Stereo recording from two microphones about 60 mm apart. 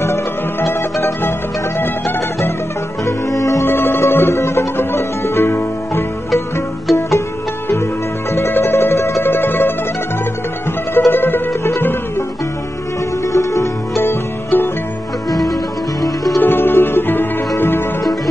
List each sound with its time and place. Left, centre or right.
0.0 s music: left
3.1 s music: left
3.6 s music: left
6.9 s music: centre
8.3 s music: left
9.3 s music: left
11.1 s music: left
13.3 s music: left
14.0 s music: left
15.2 s music: left
16.3 s music: left